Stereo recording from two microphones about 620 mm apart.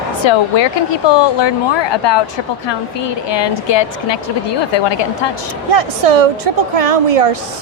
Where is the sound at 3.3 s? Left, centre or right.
Left.